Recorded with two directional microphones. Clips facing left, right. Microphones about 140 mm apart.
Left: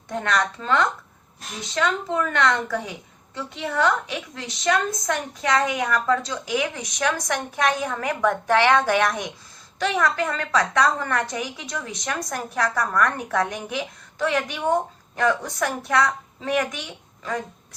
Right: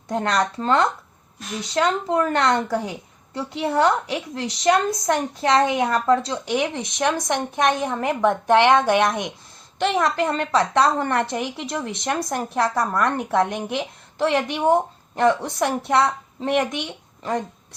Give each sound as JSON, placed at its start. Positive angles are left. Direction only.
{"t": 0.1, "sound": "a woman's voice", "side_deg": -35}